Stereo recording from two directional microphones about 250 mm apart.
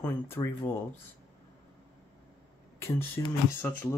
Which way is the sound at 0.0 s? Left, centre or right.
Centre.